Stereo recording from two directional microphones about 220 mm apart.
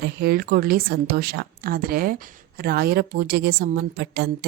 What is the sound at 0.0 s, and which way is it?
A woman's voice, 45° right (ahead or behind).